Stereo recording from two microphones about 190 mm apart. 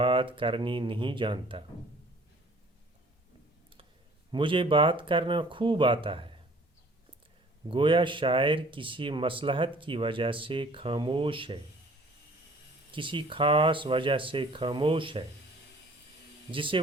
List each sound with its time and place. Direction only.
0.0 s speech: 25° right (ahead or behind)
4.3 s speech: 25° right (ahead or behind)
7.7 s speech: 25° right (ahead or behind)
12.9 s speech: 25° right (ahead or behind)
16.5 s speech: 25° right (ahead or behind)